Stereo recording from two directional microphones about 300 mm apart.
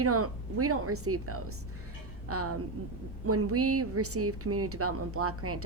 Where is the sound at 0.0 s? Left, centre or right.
Right.